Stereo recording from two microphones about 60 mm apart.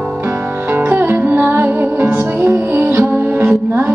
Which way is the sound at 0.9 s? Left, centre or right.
Right.